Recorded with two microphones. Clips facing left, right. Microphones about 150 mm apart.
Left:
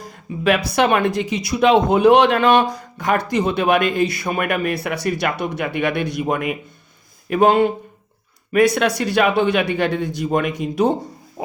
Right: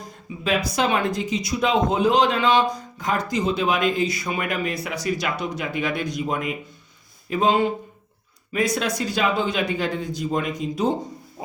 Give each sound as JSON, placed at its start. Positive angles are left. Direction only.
{"t": 0.0, "sound": "speech", "side_deg": 70}
{"t": 11.4, "sound": "music", "side_deg": 70}